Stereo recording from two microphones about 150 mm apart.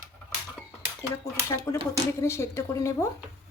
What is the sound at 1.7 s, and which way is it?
A woman's voice, 20° left (ahead or behind).